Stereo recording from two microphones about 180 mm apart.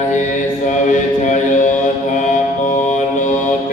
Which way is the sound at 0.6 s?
45° left (ahead or behind).